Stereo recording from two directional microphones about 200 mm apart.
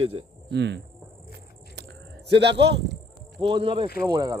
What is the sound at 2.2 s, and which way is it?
Speech, 60° right (ahead or behind).